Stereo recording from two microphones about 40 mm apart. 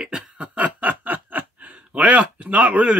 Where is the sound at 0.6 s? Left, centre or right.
Right.